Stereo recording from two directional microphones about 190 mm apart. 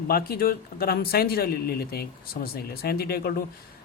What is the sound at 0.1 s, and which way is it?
Speech, 50° left (ahead or behind).